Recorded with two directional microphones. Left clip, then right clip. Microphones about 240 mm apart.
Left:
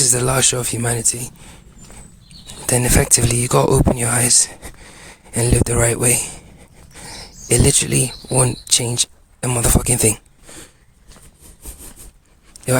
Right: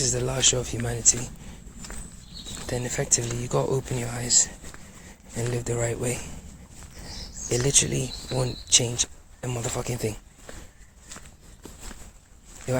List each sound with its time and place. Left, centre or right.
0.0 s speech: left
2.6 s speech: left
7.4 s speech: left